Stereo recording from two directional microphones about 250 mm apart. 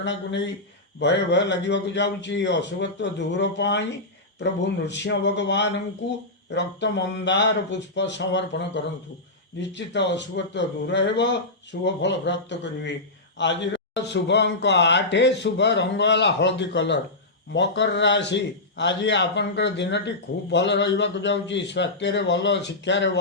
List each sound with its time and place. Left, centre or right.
0.0 s a man's voice: left